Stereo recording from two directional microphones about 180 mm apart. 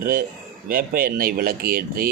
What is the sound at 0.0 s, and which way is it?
A man's voice, 60° right (ahead or behind).